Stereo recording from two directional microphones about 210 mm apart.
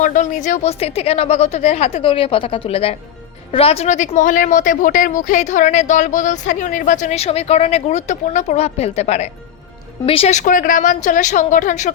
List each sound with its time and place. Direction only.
0.0 s speech: 35° left (ahead or behind)